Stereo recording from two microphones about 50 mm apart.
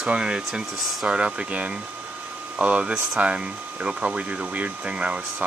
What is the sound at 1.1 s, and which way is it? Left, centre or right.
Speech, right.